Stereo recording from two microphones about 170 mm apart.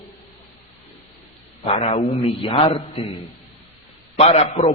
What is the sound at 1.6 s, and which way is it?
A man's voice, 35° left (ahead or behind).